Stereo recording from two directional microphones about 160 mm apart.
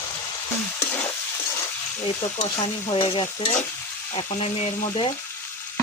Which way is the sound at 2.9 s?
35° left (ahead or behind).